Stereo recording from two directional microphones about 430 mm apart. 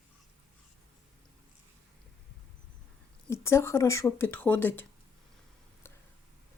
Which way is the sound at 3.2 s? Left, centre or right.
Centre.